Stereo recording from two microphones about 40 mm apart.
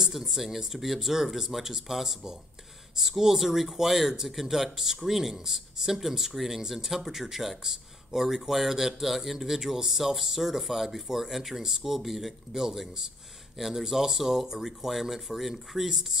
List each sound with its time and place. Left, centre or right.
0.0 s speech: centre